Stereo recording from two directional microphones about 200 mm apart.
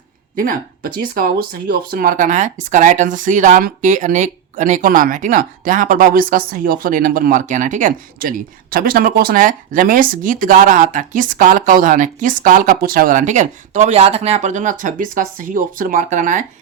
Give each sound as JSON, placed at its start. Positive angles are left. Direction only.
{"t": 0.3, "sound": "speech", "side_deg": -45}